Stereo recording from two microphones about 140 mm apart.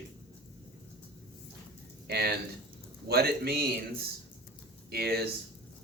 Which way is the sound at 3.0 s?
90° right.